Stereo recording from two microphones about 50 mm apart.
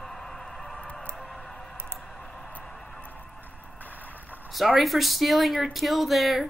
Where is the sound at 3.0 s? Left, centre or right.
Left.